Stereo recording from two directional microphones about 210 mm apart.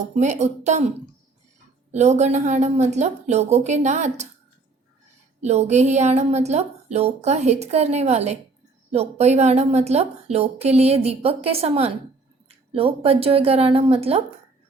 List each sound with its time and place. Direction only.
0.2 s a woman's voice: 35° right (ahead or behind)
1.9 s a woman's voice: 35° right (ahead or behind)
5.4 s a woman's voice: 30° right (ahead or behind)